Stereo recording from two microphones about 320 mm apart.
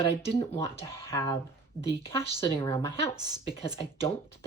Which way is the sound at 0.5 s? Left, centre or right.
Centre.